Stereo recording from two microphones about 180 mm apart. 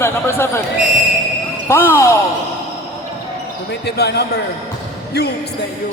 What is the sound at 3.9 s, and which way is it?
A man's voice, 65° left (ahead or behind).